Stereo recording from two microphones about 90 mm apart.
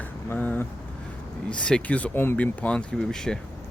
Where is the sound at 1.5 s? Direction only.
10° left (ahead or behind).